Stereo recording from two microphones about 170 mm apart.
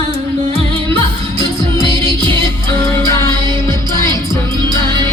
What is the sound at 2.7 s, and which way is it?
Music, 15° left (ahead or behind).